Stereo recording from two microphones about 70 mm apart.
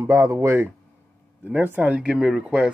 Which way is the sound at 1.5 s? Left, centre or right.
Right.